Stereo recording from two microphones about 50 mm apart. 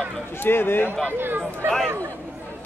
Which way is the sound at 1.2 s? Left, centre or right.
Right.